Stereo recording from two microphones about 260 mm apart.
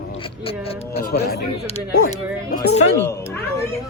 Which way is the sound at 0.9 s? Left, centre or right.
Left.